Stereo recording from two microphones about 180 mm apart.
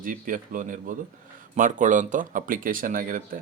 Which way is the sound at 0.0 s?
50° right (ahead or behind).